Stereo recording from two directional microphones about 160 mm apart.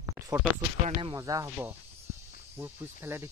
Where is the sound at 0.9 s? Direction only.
35° right (ahead or behind).